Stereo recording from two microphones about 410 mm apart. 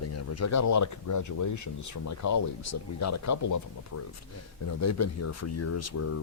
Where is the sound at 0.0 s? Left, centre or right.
Left.